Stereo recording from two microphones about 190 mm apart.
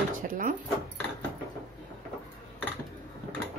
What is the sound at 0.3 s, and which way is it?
Speech, 45° right (ahead or behind).